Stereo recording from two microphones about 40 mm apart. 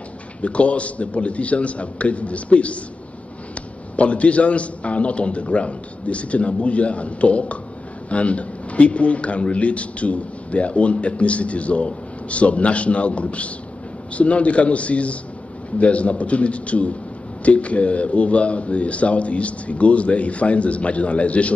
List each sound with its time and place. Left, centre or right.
0.4 s a man's voice: left
3.9 s a man's voice: left